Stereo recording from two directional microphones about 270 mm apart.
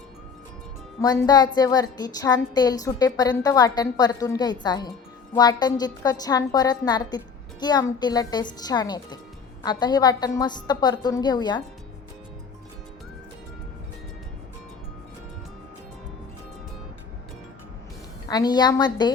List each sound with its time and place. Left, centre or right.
1.0 s a woman's voice: centre
18.3 s a woman's voice: centre